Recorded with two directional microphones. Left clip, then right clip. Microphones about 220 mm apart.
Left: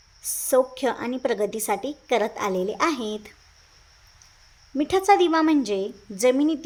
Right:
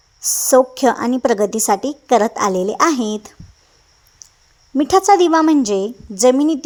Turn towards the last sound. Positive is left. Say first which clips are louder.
# right 7 dB
turn(degrees=-25)  # may be behind; listen again after turning